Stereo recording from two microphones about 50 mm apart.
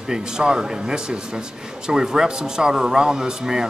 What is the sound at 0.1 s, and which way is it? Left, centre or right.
Speech, centre.